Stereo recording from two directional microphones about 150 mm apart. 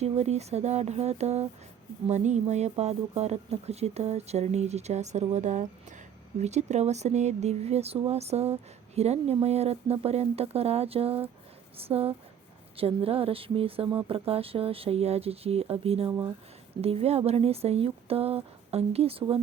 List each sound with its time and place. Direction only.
0.0 s speech: 45° right (ahead or behind)